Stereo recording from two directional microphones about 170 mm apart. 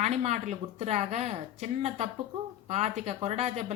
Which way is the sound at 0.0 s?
40° right (ahead or behind).